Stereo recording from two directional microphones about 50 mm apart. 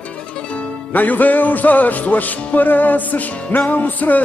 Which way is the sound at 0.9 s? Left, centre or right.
Left.